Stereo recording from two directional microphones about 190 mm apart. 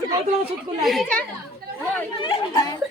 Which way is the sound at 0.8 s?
Centre (ahead or behind).